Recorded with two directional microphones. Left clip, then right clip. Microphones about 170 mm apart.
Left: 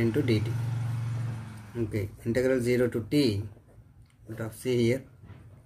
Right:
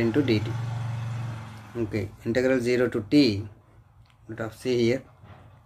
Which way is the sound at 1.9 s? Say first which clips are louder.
Right 3 dB; 20° right (ahead or behind).